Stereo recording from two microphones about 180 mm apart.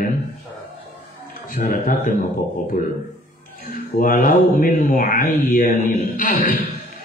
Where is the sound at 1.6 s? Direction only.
55° left (ahead or behind).